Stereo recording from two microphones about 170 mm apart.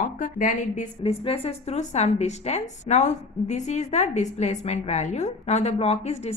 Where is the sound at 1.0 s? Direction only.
35° left (ahead or behind).